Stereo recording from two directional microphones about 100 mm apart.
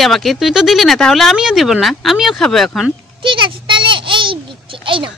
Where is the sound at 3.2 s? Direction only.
55° right (ahead or behind).